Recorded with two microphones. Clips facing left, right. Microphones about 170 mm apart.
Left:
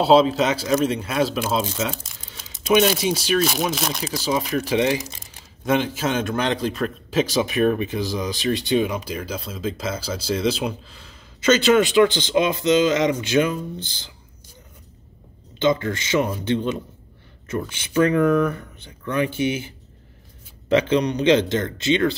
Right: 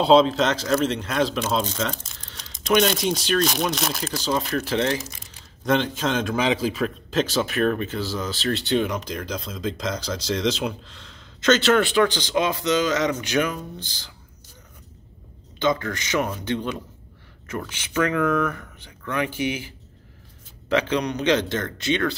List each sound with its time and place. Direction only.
0.0 s a man's voice: 5° left (ahead or behind)
7.1 s speech: 10° left (ahead or behind)
15.6 s speech: 25° left (ahead or behind)
17.5 s speech: 30° left (ahead or behind)
20.7 s speech: 25° left (ahead or behind)